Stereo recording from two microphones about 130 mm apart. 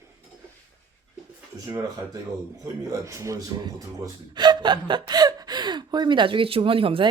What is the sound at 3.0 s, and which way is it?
Speech, 25° right (ahead or behind).